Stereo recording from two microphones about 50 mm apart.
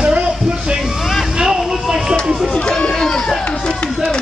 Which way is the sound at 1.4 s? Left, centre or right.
Centre.